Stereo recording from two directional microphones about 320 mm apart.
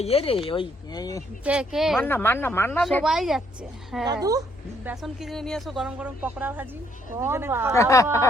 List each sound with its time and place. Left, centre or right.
0.0 s speech: centre
1.5 s a woman's voice: centre
4.0 s a woman's voice: centre
7.7 s speech: centre